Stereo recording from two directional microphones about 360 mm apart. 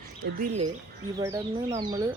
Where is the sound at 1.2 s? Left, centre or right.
Centre.